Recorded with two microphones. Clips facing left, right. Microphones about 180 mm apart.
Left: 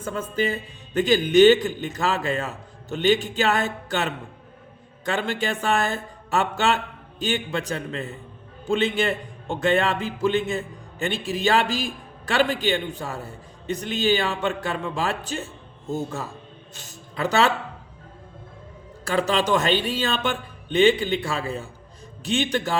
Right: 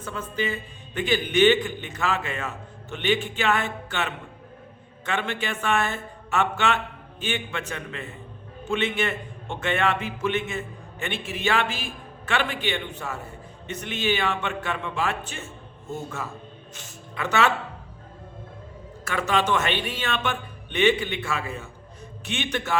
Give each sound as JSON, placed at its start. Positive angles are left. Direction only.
{"t": 0.0, "sound": "a man's voice", "side_deg": 45}
{"t": 19.0, "sound": "a man's voice", "side_deg": 30}